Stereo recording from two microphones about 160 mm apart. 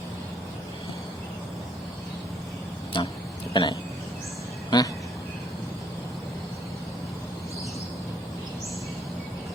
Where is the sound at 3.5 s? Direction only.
30° left (ahead or behind).